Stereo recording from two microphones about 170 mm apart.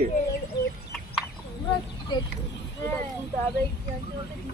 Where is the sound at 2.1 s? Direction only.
25° left (ahead or behind).